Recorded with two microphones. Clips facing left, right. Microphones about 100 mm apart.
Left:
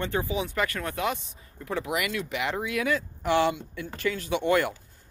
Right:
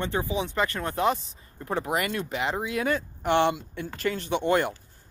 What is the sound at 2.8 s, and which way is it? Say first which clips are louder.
Speech: even; 40° right (ahead or behind).